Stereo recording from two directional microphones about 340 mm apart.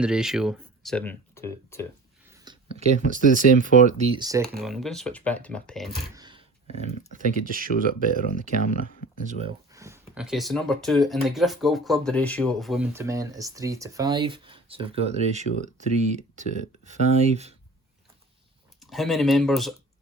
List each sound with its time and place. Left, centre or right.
0.0 s speech: centre
2.3 s a sound: centre
3.3 s speech: right
4.5 s speech: centre
6.1 s roar: centre
7.1 s speech: right
9.7 s speech: centre
18.8 s speech: centre